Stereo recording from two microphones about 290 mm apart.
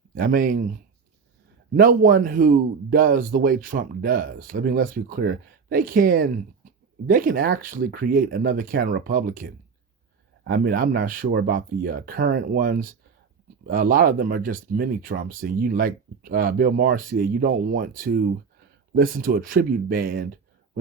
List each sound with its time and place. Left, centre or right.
0.1 s speech: right